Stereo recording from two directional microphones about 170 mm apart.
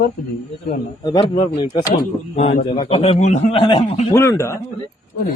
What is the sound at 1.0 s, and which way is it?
A man's voice, 25° left (ahead or behind).